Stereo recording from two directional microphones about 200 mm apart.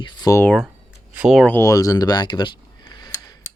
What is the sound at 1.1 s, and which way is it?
Speech, 5° right (ahead or behind).